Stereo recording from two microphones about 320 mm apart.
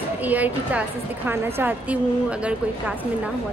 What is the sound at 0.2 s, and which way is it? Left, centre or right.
A woman's voice, centre.